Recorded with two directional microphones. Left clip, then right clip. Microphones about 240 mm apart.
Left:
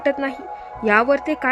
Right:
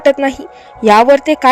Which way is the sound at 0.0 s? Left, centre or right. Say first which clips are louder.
Right 10 dB; centre.